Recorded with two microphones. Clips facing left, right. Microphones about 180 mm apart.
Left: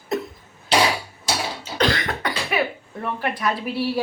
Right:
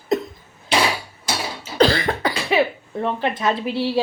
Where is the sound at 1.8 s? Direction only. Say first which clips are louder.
Right 5 dB; 30° right (ahead or behind).